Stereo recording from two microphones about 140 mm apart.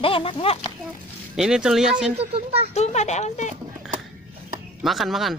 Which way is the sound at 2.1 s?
45° right (ahead or behind).